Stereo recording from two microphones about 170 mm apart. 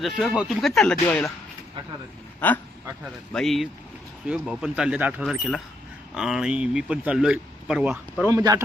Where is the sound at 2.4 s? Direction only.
10° left (ahead or behind); by 8.0 s 5° right (ahead or behind).